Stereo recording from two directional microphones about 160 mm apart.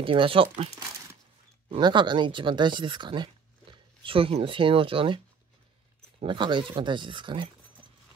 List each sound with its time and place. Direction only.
0.0 s speech: 35° right (ahead or behind)
6.2 s speech: 30° right (ahead or behind)